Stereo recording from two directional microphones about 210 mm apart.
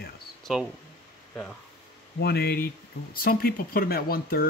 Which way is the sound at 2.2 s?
50° left (ahead or behind).